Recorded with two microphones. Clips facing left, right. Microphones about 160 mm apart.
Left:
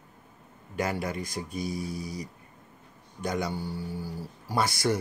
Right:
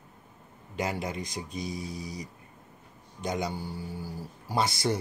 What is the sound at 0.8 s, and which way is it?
Speech, 20° right (ahead or behind).